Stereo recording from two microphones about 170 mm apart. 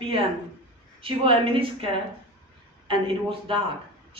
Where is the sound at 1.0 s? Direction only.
30° right (ahead or behind).